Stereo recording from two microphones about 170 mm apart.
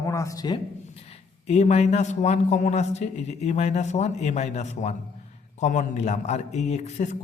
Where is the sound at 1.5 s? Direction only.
40° left (ahead or behind).